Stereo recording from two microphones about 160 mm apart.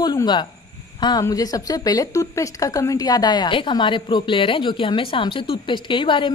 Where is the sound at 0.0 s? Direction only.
25° left (ahead or behind).